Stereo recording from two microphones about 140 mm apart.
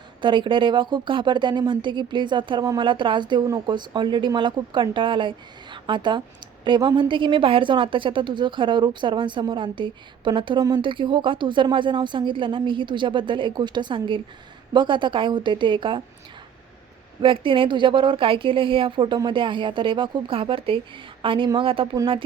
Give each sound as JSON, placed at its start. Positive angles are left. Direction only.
{"t": 0.2, "sound": "a woman's voice", "side_deg": -35}
{"t": 17.2, "sound": "a woman's voice", "side_deg": -40}